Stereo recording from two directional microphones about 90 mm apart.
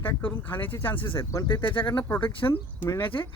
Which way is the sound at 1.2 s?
35° left (ahead or behind).